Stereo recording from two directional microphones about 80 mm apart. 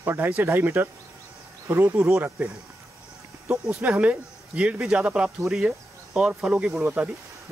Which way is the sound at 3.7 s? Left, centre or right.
Centre.